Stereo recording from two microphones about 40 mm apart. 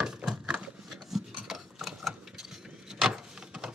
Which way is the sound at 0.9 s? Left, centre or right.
Centre.